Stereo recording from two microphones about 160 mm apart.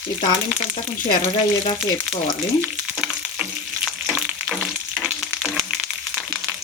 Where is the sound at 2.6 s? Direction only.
5° right (ahead or behind).